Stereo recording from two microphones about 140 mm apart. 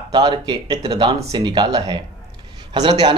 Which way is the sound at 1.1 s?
25° right (ahead or behind).